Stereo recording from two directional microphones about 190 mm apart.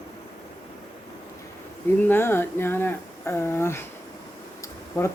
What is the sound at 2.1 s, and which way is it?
Speech, 10° left (ahead or behind).